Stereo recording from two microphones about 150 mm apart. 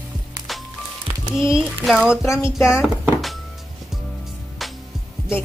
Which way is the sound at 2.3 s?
20° left (ahead or behind).